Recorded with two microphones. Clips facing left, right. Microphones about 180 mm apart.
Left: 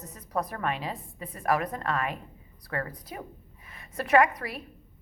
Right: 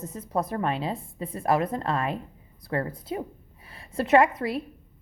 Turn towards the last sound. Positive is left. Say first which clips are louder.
# right 3 dB
turn(degrees=-25)  # may be behind; listen again after turning